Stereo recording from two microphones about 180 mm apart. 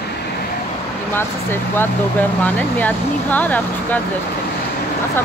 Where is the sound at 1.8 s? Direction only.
10° left (ahead or behind).